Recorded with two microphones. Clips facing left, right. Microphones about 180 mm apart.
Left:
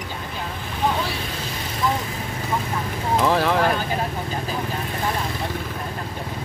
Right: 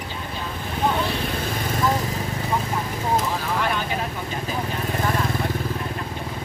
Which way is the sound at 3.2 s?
75° left (ahead or behind).